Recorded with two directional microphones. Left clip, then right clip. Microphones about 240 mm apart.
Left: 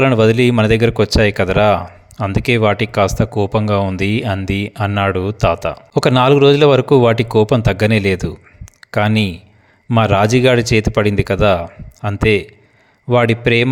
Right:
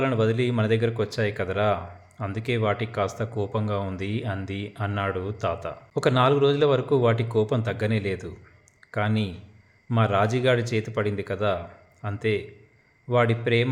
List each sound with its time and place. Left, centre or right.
0.0 s speech: left